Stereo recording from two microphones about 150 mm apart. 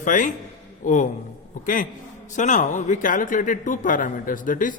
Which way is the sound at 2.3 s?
55° left (ahead or behind).